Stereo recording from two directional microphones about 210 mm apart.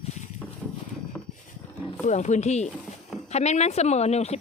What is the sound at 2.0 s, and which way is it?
Speech, 35° left (ahead or behind).